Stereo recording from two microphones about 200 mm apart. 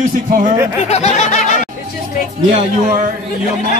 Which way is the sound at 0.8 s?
35° left (ahead or behind).